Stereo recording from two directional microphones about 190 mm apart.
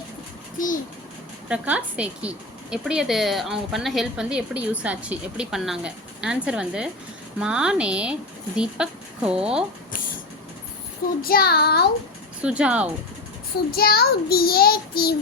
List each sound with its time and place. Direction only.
1.5 s a woman's voice: 5° right (ahead or behind)
11.2 s child singing: 50° left (ahead or behind)
12.4 s speech: 5° right (ahead or behind)
13.7 s child singing: 55° left (ahead or behind)